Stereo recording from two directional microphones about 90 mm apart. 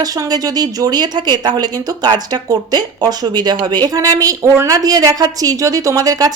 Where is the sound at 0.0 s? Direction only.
45° right (ahead or behind).